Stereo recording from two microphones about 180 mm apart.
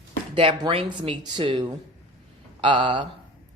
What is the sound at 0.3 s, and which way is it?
Speech, 30° right (ahead or behind).